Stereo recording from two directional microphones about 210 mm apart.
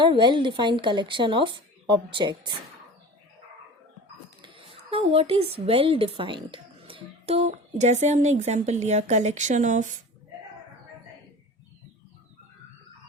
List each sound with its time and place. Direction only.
0.0 s speech: 20° right (ahead or behind)
4.4 s a woman's voice: 25° right (ahead or behind)